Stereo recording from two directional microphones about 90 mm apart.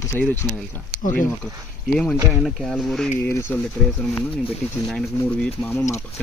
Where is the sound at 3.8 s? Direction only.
5° left (ahead or behind).